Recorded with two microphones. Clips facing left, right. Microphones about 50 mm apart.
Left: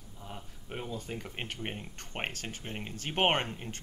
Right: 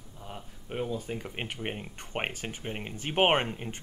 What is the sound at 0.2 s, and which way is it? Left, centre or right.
Speech, centre.